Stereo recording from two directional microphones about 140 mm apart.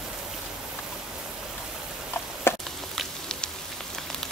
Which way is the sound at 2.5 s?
15° left (ahead or behind).